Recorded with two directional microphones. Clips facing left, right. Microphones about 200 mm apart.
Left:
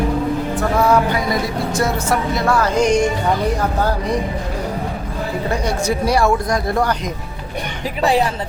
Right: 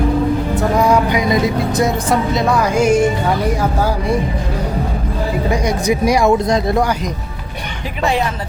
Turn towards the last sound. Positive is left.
turn(degrees=-20)  # may be behind; listen again after turning